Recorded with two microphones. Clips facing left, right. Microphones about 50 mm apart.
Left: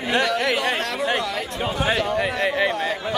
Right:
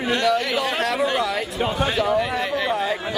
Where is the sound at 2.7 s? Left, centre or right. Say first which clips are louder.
Right 2 dB; centre.